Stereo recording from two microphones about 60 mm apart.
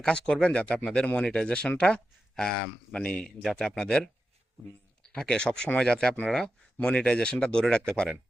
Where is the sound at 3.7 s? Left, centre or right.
Centre.